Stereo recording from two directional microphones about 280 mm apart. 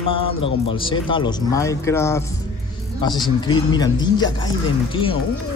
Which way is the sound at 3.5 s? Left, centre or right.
Centre.